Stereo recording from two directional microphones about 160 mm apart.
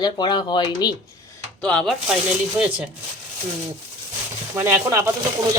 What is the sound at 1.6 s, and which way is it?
Speech, 5° left (ahead or behind).